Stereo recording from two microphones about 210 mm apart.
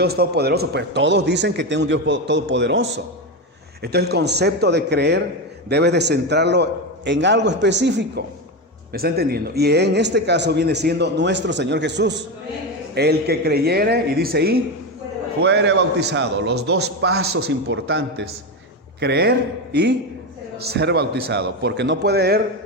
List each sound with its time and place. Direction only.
0.0 s a man's voice: 50° right (ahead or behind)